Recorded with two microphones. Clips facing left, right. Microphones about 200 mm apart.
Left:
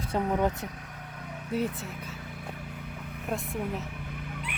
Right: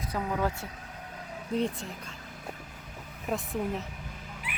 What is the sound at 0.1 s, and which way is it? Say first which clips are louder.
Speech: left 4 dB; 20° left (ahead or behind).